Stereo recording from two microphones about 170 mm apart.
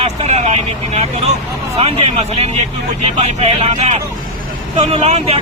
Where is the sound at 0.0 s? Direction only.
40° right (ahead or behind).